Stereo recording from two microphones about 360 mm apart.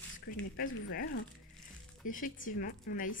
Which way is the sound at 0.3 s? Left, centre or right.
Left.